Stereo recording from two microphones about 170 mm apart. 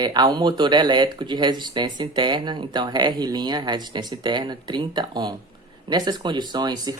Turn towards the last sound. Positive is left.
turn(degrees=-25)  # may be behind; listen again after turning